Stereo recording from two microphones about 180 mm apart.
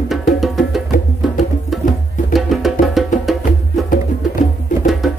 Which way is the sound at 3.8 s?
50° left (ahead or behind).